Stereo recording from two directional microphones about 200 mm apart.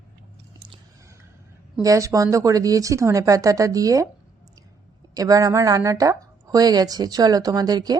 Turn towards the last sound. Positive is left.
turn(degrees=-20)  # may be behind; listen again after turning